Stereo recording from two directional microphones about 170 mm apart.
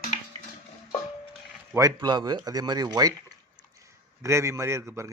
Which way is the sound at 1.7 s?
20° right (ahead or behind).